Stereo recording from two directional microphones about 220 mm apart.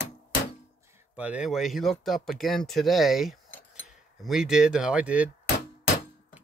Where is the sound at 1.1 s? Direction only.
5° right (ahead or behind).